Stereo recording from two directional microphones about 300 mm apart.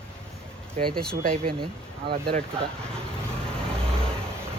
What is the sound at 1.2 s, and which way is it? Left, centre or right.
Speech, right.